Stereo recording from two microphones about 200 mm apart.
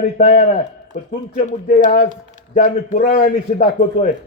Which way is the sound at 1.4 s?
30° left (ahead or behind).